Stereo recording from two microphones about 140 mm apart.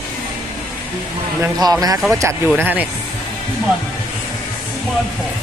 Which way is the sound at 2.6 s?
10° right (ahead or behind).